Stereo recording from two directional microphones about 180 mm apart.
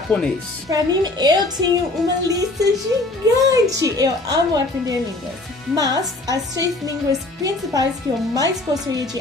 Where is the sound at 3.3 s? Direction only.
20° right (ahead or behind).